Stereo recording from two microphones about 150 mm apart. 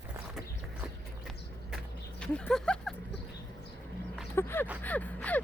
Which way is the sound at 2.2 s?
5° left (ahead or behind).